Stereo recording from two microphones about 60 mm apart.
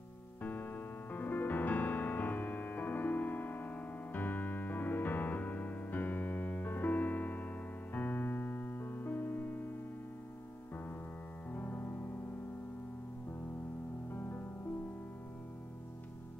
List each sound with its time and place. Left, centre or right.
0.4 s music: left
11.5 s music: left
14.1 s music: left